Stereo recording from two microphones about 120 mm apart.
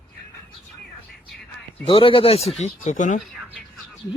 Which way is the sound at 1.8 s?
50° left (ahead or behind).